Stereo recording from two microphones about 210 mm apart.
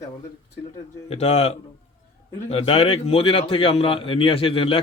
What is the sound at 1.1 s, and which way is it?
A man's voice, 30° left (ahead or behind).